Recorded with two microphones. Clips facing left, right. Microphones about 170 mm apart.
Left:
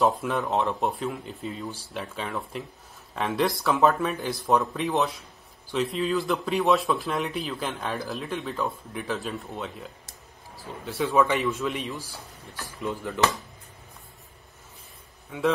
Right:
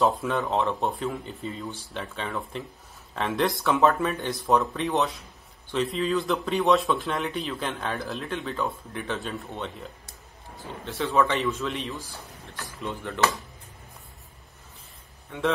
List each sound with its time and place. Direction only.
0.0 s speech: centre (ahead or behind)
11.0 s a man's voice: 15° left (ahead or behind)
11.4 s speech: centre (ahead or behind)